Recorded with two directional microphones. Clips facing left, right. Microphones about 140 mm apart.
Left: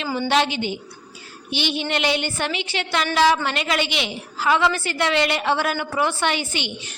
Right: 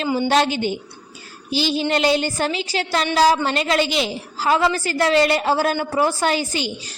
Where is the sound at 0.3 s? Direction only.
40° right (ahead or behind).